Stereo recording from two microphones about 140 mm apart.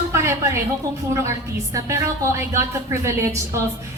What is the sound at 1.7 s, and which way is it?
A woman's voice, 20° right (ahead or behind).